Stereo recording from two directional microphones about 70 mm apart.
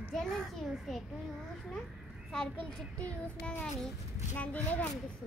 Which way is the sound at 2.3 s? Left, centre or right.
Centre.